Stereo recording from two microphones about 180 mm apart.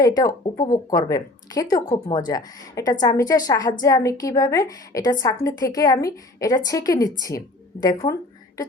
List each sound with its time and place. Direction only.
0.0 s a woman's voice: 20° left (ahead or behind)